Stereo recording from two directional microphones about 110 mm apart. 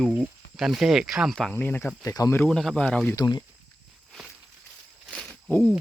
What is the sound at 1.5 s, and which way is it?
Speech, 15° left (ahead or behind).